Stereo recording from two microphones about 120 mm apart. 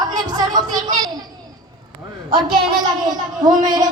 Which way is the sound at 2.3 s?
35° right (ahead or behind).